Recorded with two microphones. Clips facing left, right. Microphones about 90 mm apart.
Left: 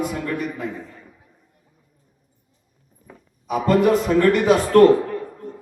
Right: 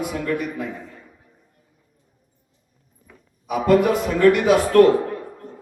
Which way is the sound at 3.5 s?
5° right (ahead or behind).